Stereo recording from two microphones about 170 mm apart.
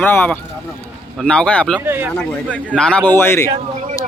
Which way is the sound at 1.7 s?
10° right (ahead or behind).